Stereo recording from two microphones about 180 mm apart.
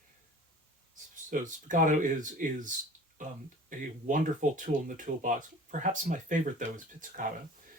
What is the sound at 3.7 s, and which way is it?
Speech, 45° right (ahead or behind).